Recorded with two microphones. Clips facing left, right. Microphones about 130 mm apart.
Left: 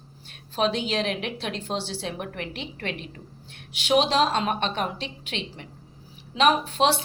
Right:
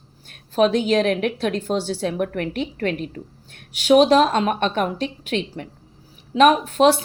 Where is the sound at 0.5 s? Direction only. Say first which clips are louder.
Right 8 dB; 45° right (ahead or behind).